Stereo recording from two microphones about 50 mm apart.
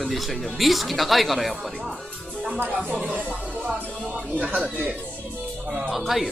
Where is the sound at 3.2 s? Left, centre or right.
Right.